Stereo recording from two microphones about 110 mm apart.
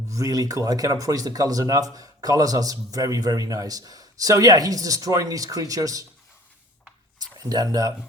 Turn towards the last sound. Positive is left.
turn(degrees=-30)  # may be behind; listen again after turning